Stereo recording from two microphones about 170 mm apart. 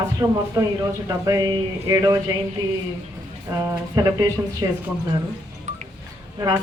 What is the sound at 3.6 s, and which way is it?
Speech, 20° right (ahead or behind).